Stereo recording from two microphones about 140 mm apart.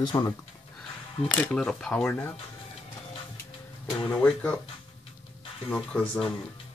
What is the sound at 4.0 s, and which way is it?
Speech, 5° left (ahead or behind).